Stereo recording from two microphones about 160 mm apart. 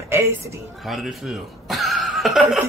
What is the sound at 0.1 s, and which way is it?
Speech, 15° right (ahead or behind).